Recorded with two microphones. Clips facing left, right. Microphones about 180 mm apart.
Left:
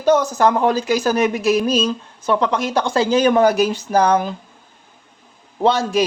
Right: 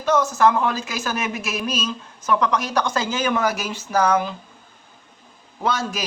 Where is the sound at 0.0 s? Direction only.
35° left (ahead or behind).